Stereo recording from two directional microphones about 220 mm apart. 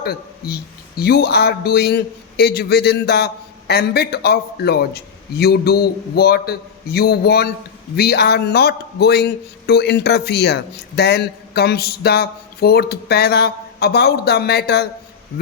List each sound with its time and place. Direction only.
0.0 s speech: 45° left (ahead or behind)